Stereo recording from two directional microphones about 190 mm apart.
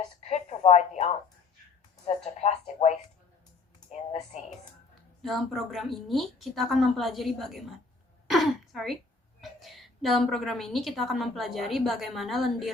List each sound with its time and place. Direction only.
0.2 s a sound: 35° left (ahead or behind)
2.0 s a woman's voice: 35° left (ahead or behind)
3.9 s a woman's voice: 35° left (ahead or behind)
5.2 s a woman's voice: centre (ahead or behind)
8.3 s throat clearing: centre (ahead or behind)
9.4 s a woman's voice: centre (ahead or behind)